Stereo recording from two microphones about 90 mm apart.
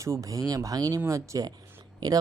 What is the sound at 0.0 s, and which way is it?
Speech, 35° right (ahead or behind).